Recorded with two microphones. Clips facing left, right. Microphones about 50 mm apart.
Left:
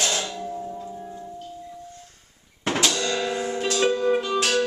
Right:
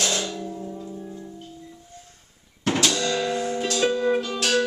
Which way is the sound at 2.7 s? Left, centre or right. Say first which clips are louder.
Even; centre.